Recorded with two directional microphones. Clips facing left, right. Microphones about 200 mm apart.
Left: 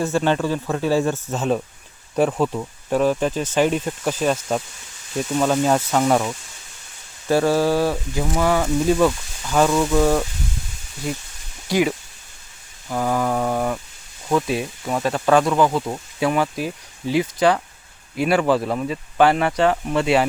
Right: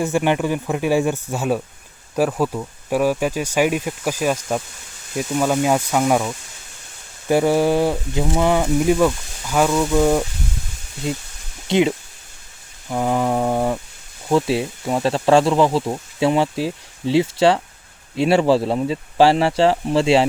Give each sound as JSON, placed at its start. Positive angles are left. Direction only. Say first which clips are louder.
{"t": 0.0, "sound": "speech", "louder": "right 1 dB", "side_deg": -15}
{"t": 7.3, "sound": "speech", "louder": "right 1 dB", "side_deg": -15}
{"t": 11.7, "sound": "speech", "louder": "right 2 dB", "side_deg": -25}